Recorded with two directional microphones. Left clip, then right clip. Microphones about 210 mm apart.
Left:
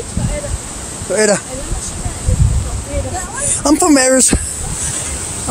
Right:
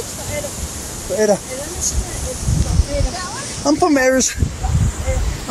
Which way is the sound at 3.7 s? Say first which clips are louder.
Left 3 dB; 35° left (ahead or behind).